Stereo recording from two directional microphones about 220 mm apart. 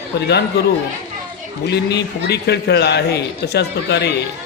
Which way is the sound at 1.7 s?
50° left (ahead or behind).